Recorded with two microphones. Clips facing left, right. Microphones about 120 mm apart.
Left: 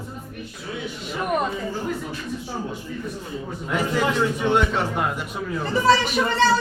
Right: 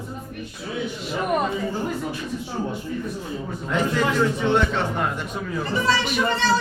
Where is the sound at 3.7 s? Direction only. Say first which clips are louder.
Even; 10° left (ahead or behind).